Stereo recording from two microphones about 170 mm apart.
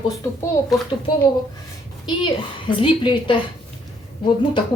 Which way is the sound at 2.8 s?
30° left (ahead or behind).